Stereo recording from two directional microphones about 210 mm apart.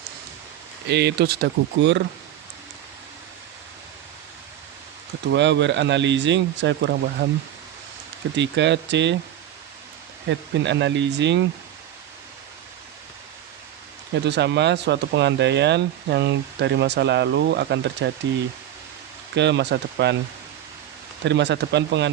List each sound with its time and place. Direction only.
0.9 s speech: 55° right (ahead or behind)
5.3 s speech: 55° right (ahead or behind)
8.4 s speech: 55° right (ahead or behind)
10.2 s speech: 55° right (ahead or behind)
14.1 s speech: 55° right (ahead or behind)
19.4 s speech: 55° right (ahead or behind)
21.2 s speech: 55° right (ahead or behind)